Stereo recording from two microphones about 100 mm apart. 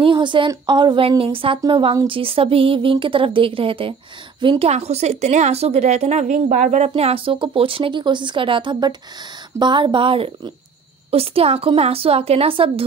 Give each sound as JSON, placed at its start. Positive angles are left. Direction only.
{"t": 0.0, "sound": "a woman's voice", "side_deg": -55}
{"t": 1.0, "sound": "a woman's voice", "side_deg": -65}
{"t": 7.0, "sound": "a woman's voice", "side_deg": -80}
{"t": 11.1, "sound": "a woman's voice", "side_deg": -80}